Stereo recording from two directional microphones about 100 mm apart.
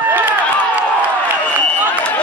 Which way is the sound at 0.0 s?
15° right (ahead or behind).